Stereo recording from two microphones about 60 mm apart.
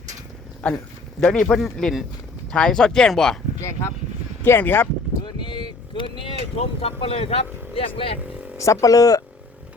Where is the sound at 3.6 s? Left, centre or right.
Left.